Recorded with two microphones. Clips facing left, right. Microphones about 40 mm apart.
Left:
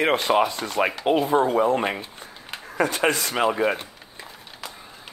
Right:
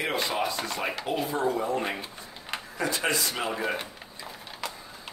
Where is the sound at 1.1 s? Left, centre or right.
Left.